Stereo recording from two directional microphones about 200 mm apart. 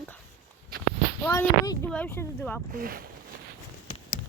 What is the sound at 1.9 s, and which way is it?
Speech, 10° left (ahead or behind).